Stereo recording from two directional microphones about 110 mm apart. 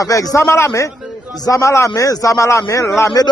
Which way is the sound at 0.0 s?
30° left (ahead or behind).